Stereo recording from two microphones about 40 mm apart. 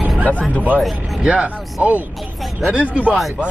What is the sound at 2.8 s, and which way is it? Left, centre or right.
Speech, right.